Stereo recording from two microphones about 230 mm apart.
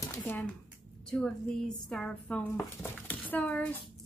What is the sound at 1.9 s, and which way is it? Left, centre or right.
A woman's voice, centre.